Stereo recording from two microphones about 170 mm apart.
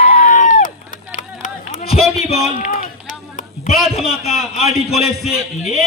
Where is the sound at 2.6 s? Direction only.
55° left (ahead or behind).